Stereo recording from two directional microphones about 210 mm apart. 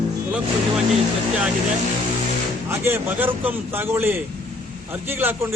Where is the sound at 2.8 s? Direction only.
10° right (ahead or behind).